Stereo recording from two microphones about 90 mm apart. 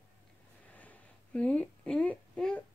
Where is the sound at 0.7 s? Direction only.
15° left (ahead or behind).